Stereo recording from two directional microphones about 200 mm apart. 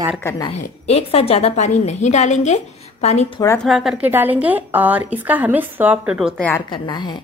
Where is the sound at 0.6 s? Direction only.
35° left (ahead or behind).